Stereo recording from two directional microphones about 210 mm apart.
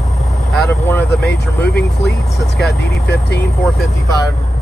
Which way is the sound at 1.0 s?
50° left (ahead or behind).